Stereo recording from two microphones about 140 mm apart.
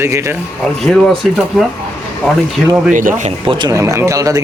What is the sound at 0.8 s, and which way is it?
Speech, 5° left (ahead or behind).